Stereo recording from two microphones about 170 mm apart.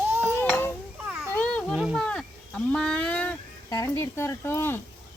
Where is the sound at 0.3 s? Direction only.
15° left (ahead or behind).